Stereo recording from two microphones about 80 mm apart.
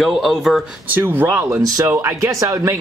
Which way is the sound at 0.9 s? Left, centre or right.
Right.